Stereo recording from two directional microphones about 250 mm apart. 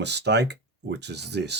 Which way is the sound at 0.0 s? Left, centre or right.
Right.